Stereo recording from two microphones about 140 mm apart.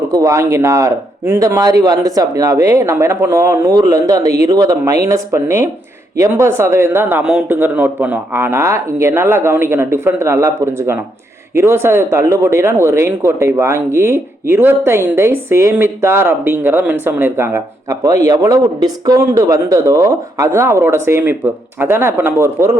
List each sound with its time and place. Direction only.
0.1 s speech: 20° right (ahead or behind)